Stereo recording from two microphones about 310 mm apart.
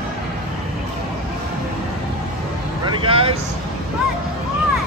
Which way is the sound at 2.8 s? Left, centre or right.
Centre.